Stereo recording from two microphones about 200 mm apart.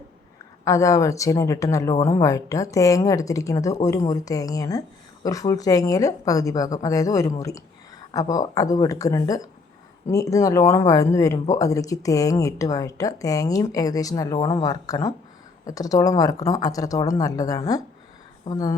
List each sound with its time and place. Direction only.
0.6 s speech: 15° left (ahead or behind)